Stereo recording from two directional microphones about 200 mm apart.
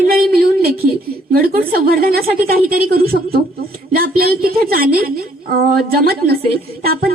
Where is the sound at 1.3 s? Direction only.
50° right (ahead or behind).